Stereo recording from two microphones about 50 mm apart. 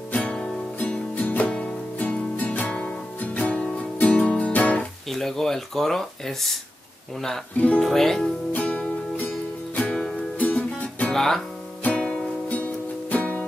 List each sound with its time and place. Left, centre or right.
0.1 s music: left
2.0 s music: left
5.1 s speech: centre
7.8 s speech: centre
8.5 s music: left
10.4 s music: left
11.1 s speech: centre
11.8 s music: left